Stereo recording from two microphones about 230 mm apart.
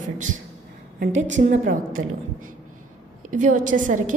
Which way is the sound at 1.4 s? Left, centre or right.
Right.